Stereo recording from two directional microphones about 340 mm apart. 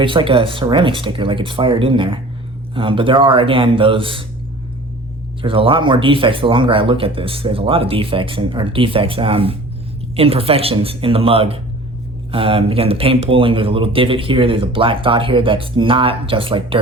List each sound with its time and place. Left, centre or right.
0.0 s speech: centre
5.4 s speech: centre